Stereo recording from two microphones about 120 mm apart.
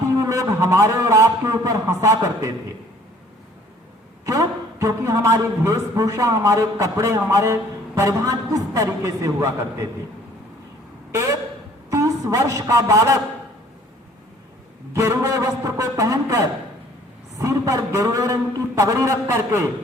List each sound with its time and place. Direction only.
0.2 s a man's voice: 30° right (ahead or behind)
4.3 s a man's voice: 30° right (ahead or behind)
11.1 s a woman's voice: 25° right (ahead or behind)
14.9 s a man's voice: 25° right (ahead or behind)